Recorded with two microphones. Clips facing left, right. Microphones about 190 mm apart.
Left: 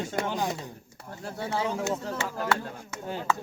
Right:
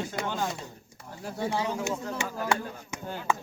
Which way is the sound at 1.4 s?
15° right (ahead or behind).